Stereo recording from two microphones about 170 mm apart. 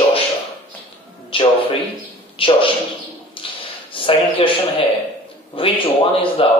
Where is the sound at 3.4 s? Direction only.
30° left (ahead or behind).